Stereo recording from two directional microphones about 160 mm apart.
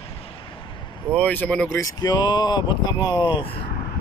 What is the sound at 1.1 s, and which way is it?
Speech, 10° left (ahead or behind).